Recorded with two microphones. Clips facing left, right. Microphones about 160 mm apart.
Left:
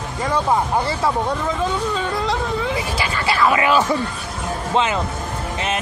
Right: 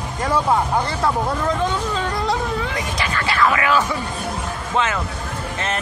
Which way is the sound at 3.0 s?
10° left (ahead or behind).